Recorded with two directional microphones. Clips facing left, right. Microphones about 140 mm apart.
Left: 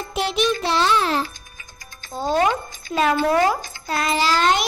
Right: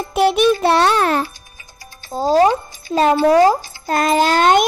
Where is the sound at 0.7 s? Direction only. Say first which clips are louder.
Right 5 dB; 60° right (ahead or behind).